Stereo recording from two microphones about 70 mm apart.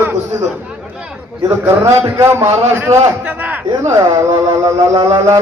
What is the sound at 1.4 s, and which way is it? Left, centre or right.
A man's voice, right.